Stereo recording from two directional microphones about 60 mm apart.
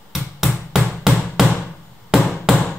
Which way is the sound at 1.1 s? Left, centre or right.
Centre.